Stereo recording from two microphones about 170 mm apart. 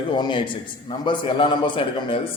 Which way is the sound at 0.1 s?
30° left (ahead or behind).